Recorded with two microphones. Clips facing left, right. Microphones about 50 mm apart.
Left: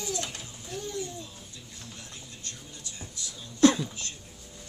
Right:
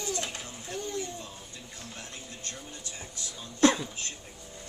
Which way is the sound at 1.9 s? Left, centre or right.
Right.